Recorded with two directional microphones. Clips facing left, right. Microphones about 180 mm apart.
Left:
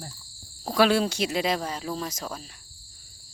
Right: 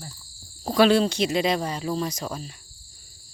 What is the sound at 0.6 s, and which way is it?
Speech, 5° left (ahead or behind).